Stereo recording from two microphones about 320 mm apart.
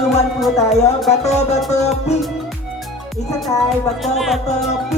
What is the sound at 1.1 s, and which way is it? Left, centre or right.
Music, left.